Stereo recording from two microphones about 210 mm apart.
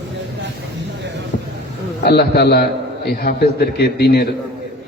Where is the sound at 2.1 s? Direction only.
50° left (ahead or behind).